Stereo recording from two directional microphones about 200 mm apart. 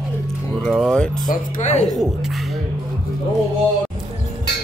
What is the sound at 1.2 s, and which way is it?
Speech, 40° left (ahead or behind).